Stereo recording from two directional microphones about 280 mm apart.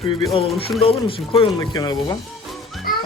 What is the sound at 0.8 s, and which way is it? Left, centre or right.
Speech, centre.